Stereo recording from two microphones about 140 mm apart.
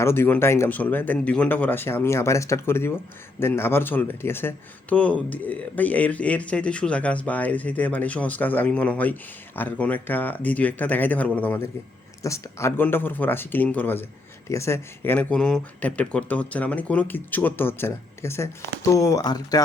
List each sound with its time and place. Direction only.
0.0 s speech: 15° left (ahead or behind)